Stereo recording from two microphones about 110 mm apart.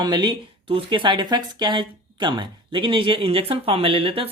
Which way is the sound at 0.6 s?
50° right (ahead or behind).